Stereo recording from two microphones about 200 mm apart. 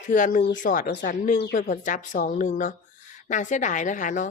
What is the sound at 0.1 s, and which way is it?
Speech, 40° left (ahead or behind).